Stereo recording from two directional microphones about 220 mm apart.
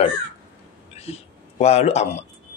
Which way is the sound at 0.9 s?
30° left (ahead or behind).